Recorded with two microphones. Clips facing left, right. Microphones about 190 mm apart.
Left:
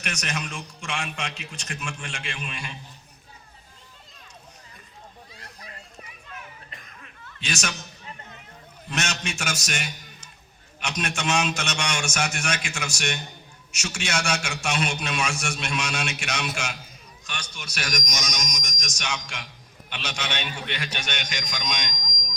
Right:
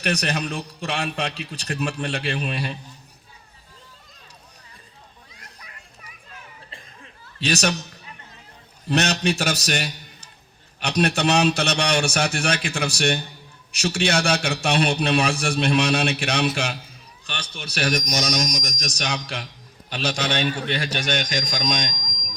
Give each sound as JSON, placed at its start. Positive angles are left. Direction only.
{"t": 0.0, "sound": "a man's voice", "side_deg": -35}
{"t": 5.3, "sound": "children playing", "side_deg": 30}
{"t": 6.7, "sound": "chuckle", "side_deg": -30}
{"t": 8.9, "sound": "a man's voice", "side_deg": -35}